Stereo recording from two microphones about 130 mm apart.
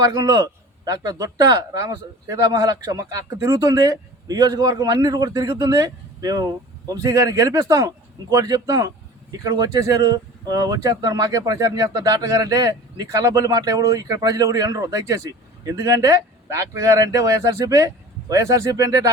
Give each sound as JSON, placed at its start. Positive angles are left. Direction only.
{"t": 0.0, "sound": "speech", "side_deg": -30}